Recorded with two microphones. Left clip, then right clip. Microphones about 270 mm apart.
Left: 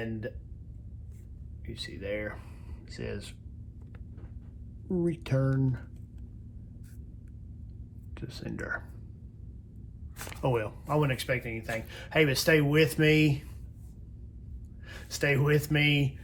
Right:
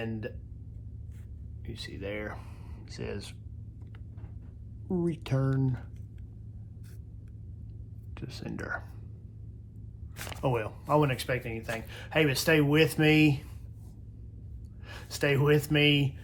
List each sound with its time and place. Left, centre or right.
0.0 s speech: centre
1.6 s speech: centre
4.9 s speech: centre
8.1 s speech: centre
10.2 s speech: centre
14.8 s speech: centre